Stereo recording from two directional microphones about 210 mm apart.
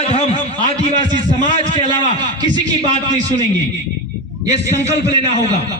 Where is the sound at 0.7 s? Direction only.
20° right (ahead or behind).